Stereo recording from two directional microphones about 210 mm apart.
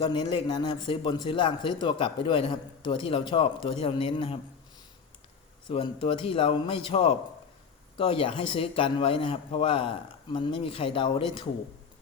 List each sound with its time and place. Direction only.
0.0 s a man's voice: 25° left (ahead or behind)
5.6 s a man's voice: 25° left (ahead or behind)